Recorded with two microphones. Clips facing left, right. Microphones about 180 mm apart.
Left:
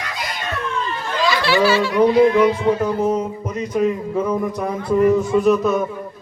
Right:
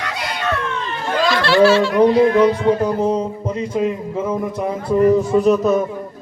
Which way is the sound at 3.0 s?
30° right (ahead or behind).